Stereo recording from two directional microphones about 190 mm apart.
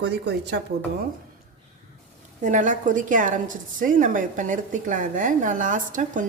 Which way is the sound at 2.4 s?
40° right (ahead or behind).